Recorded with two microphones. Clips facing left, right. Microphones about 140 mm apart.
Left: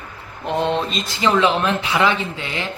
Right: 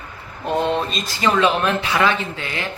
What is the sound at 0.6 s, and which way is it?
Speech, 20° left (ahead or behind).